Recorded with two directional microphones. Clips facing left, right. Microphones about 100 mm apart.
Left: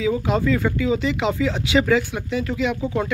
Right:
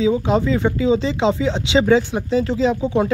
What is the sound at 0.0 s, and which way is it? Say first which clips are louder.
Speech: right 3 dB; 25° right (ahead or behind).